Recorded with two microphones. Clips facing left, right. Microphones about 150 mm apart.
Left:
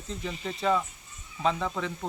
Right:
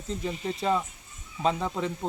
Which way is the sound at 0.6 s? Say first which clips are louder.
Left 2 dB; 20° right (ahead or behind).